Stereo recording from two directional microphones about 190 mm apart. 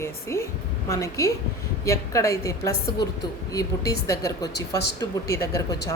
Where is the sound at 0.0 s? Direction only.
15° left (ahead or behind).